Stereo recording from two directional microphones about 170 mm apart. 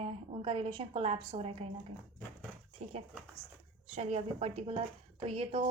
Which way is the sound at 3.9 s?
40° right (ahead or behind).